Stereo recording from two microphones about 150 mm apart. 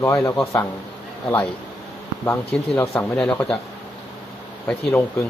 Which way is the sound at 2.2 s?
20° left (ahead or behind).